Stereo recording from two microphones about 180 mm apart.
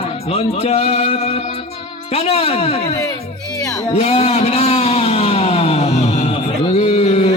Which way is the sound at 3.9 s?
35° left (ahead or behind).